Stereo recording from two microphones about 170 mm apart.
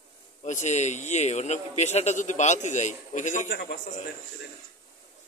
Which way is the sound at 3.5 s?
75° left (ahead or behind).